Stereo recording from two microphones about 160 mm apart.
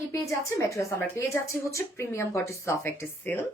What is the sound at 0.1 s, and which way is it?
A woman's voice, 20° left (ahead or behind).